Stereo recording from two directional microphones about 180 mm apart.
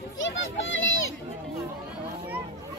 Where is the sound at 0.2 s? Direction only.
90° left.